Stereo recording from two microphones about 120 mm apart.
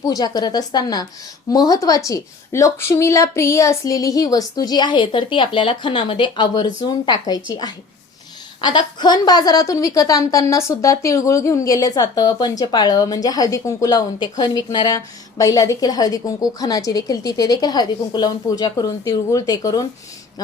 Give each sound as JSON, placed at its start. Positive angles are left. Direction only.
{"t": 0.0, "sound": "a woman's voice", "side_deg": 30}